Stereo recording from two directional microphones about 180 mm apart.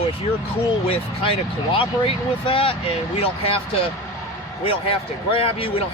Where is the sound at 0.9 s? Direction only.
30° left (ahead or behind).